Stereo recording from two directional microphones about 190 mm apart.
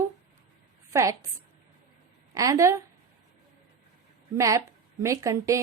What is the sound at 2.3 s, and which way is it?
Speech, 15° right (ahead or behind).